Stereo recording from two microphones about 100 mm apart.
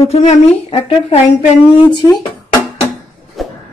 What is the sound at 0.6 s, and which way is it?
Speech, 70° left (ahead or behind).